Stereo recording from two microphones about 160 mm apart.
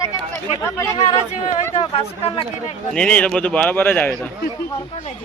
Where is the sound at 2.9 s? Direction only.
5° left (ahead or behind).